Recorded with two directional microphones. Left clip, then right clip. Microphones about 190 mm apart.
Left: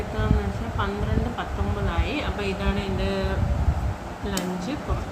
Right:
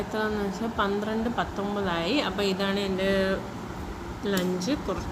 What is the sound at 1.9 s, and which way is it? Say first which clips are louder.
Speech: right 3 dB; 60° right (ahead or behind).